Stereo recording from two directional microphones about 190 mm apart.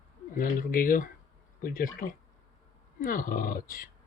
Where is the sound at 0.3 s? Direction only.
45° left (ahead or behind).